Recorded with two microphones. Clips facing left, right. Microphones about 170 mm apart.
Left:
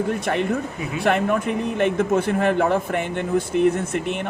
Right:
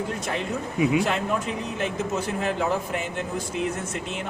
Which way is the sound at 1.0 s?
60° left (ahead or behind).